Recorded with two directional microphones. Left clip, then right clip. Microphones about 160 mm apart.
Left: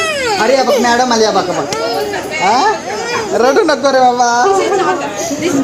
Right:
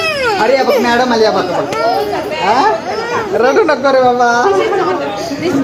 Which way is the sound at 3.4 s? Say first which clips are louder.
Even; 45° left (ahead or behind).